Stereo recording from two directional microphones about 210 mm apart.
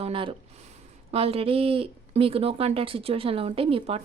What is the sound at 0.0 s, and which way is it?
Speech, 25° right (ahead or behind).